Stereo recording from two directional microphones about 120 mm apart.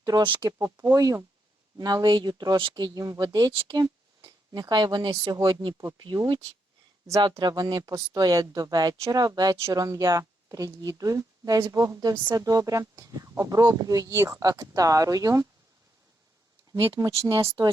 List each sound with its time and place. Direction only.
0.0 s speech: 35° right (ahead or behind)
0.4 s speech: 25° right (ahead or behind)
16.9 s speech: 25° right (ahead or behind)